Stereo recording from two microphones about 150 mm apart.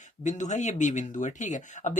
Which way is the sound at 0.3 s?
55° left (ahead or behind).